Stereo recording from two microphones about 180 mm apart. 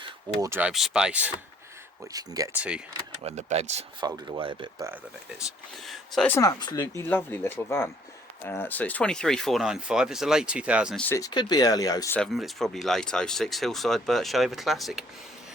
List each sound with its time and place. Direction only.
0.0 s a sound: 20° right (ahead or behind)
0.6 s speech: 5° right (ahead or behind)
2.1 s speech: 20° right (ahead or behind)
2.6 s speech: 5° right (ahead or behind)
3.2 s speech: 35° right (ahead or behind)
4.0 s speech: 25° right (ahead or behind)
5.7 s speech: centre (ahead or behind)
6.3 s speech: 20° left (ahead or behind); by 11.0 s 5° right (ahead or behind)
11.0 s speech: 15° left (ahead or behind)
12.1 s speech: centre (ahead or behind)